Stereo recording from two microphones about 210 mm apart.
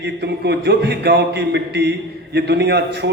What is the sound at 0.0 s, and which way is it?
A man's voice, 55° right (ahead or behind).